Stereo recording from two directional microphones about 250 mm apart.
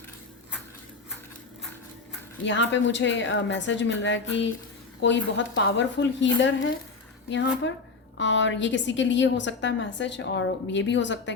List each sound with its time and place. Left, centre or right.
2.4 s a woman's voice: left